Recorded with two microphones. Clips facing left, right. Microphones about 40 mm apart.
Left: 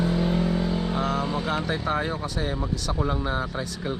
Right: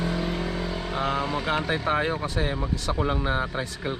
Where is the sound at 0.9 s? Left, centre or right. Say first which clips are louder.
Even; right.